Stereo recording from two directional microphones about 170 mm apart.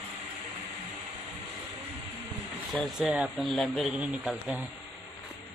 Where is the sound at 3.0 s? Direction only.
5° right (ahead or behind).